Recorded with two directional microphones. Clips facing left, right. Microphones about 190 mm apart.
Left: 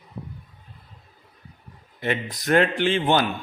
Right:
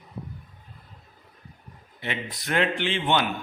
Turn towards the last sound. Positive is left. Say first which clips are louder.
# left 4 dB
turn(degrees=40)  # may be behind; listen again after turning